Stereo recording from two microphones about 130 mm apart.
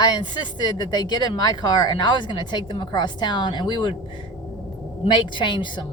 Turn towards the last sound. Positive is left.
turn(degrees=40)  # may be behind; listen again after turning